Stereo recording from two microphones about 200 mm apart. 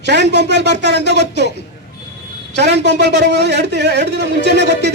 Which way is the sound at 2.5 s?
60° right (ahead or behind).